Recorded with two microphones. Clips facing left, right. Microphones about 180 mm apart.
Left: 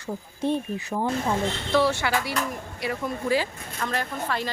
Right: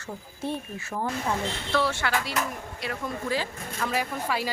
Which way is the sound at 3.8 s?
10° right (ahead or behind).